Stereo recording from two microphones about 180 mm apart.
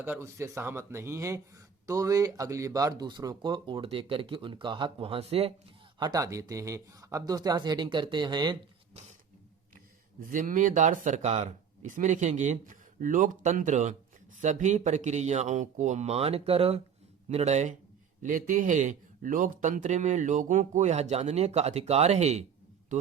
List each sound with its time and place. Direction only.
0.0 s speech: 15° right (ahead or behind); by 5.5 s 30° right (ahead or behind)
6.0 s speech: 20° right (ahead or behind)
10.2 s speech: 50° right (ahead or behind)